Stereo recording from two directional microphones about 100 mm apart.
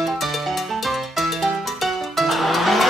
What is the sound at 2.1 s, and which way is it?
Vehicle, centre (ahead or behind).